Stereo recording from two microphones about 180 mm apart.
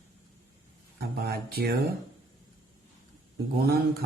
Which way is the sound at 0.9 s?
60° right (ahead or behind).